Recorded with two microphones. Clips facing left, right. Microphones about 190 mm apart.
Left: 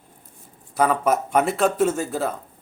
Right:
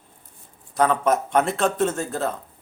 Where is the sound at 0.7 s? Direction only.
5° left (ahead or behind).